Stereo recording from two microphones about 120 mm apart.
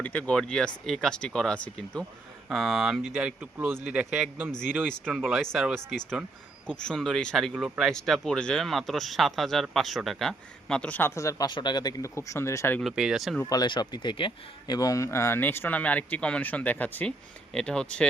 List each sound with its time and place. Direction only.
0.0 s a man's voice: 10° left (ahead or behind); by 4.5 s 10° right (ahead or behind)
5.1 s speech: centre (ahead or behind)
6.7 s speech: 5° left (ahead or behind)
12.8 s speech: 5° right (ahead or behind)
13.4 s a man's voice: 35° left (ahead or behind); by 18.1 s 10° left (ahead or behind)